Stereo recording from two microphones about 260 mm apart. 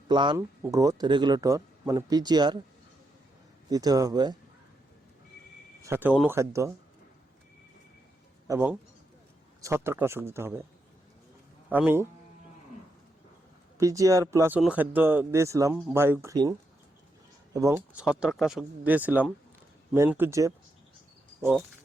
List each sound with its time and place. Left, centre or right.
0.1 s speech: centre
3.7 s speech: centre
5.8 s speech: centre
8.4 s speech: centre
11.7 s speech: centre
13.7 s speech: centre